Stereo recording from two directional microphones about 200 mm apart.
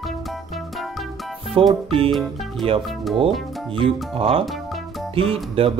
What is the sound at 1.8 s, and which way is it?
Speech, 25° right (ahead or behind).